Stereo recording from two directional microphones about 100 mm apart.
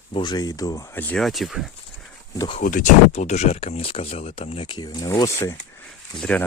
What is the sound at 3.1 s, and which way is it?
Speech, 90° left.